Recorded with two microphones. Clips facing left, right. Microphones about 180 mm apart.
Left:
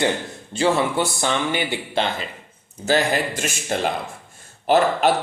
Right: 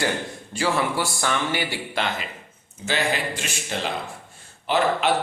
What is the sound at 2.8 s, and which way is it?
A man's voice, 45° left (ahead or behind).